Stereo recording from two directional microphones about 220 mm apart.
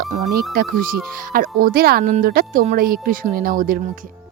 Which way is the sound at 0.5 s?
40° right (ahead or behind).